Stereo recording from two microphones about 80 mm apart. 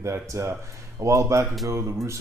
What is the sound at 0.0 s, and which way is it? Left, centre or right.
Speech, right.